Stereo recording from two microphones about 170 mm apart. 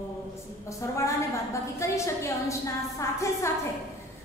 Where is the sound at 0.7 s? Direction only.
20° left (ahead or behind).